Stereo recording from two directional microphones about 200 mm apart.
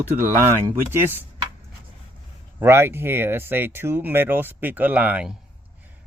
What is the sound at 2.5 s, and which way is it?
Speech, 10° right (ahead or behind).